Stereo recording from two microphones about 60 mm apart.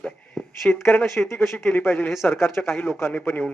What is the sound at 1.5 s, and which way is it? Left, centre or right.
A man's voice, left.